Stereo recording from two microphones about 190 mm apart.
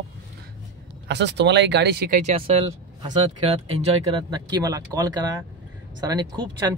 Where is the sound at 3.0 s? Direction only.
30° right (ahead or behind).